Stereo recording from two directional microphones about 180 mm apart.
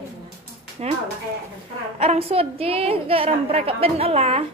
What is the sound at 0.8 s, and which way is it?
Speech, 35° right (ahead or behind).